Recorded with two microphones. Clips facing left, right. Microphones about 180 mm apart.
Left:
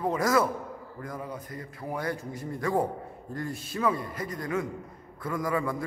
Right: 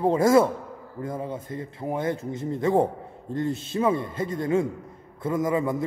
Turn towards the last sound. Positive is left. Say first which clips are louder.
# right 5 dB
turn(degrees=-20)  # may be behind; listen again after turning